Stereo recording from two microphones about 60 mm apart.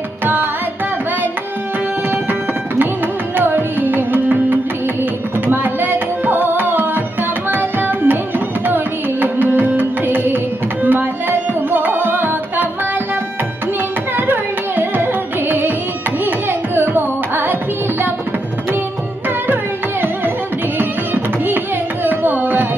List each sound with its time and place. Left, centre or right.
0.2 s carnatic music: right
3.3 s music: right
7.5 s carnatic music: right
10.8 s music: right
14.1 s carnatic music: right
19.4 s carnatic music: right
20.7 s music: right
22.0 s carnatic music: right